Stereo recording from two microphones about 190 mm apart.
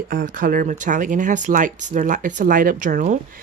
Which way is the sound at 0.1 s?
45° right (ahead or behind).